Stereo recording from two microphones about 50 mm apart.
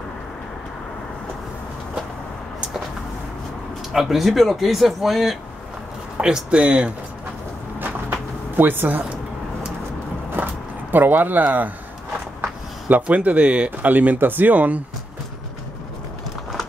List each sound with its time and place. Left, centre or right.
3.9 s speech: centre
6.2 s speech: right
7.8 s a sound: right
10.3 s a sound: right
13.0 s speech: right
13.7 s speech: right